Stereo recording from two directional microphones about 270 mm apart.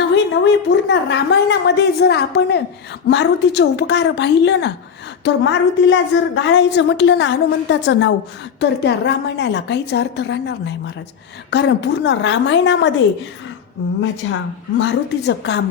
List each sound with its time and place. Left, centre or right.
0.0 s a woman's voice: left
14.2 s a woman's voice: left